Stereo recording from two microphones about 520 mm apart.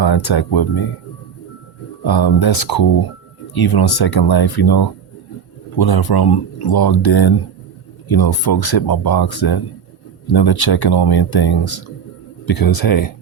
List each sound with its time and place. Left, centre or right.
0.0 s speech: left
2.0 s speech: left